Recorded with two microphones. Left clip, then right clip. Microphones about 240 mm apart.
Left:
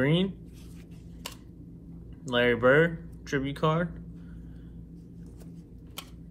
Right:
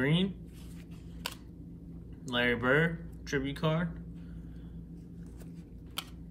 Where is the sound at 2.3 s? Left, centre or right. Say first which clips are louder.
Left 6 dB; centre.